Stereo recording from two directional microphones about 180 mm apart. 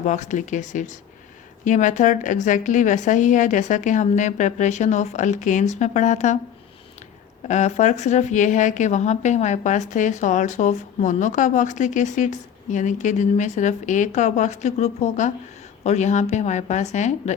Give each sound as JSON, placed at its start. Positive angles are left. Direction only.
{"t": 0.0, "sound": "a woman's voice", "side_deg": 40}
{"t": 7.4, "sound": "a woman's voice", "side_deg": 40}